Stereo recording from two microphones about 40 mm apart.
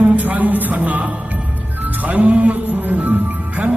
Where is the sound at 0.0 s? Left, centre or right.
Right.